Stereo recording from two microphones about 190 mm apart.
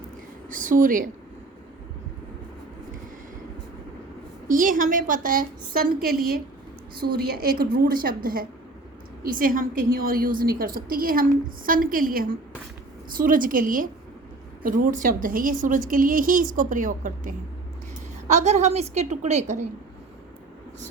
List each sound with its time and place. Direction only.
0.5 s a woman's voice: 45° right (ahead or behind)
4.4 s a woman's voice: 45° right (ahead or behind)